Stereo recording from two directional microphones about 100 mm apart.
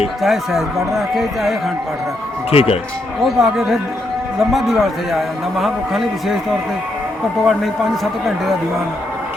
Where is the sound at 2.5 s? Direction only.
80° left.